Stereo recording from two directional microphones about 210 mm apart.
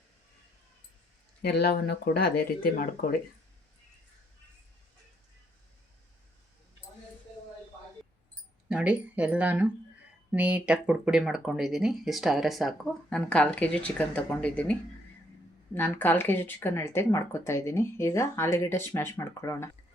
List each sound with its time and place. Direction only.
1.4 s speech: 50° left (ahead or behind)
8.7 s speech: 5° right (ahead or behind); by 19.7 s 15° left (ahead or behind)